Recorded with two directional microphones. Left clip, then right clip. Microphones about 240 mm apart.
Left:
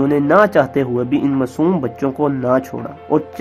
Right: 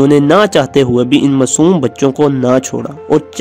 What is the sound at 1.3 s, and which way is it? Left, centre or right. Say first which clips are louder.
Speech: right 7 dB; right.